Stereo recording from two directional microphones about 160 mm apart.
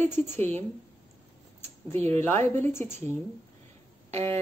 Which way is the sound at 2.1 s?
15° left (ahead or behind).